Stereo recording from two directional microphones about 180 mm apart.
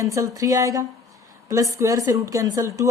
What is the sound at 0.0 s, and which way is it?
A woman's voice, 15° right (ahead or behind).